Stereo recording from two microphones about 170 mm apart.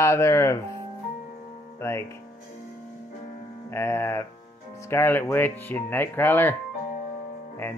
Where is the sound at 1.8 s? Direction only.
15° left (ahead or behind).